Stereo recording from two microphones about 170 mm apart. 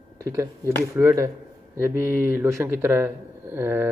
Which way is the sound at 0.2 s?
20° right (ahead or behind).